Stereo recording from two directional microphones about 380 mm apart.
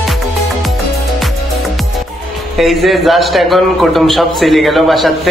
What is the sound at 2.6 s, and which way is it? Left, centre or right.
A man's voice, centre.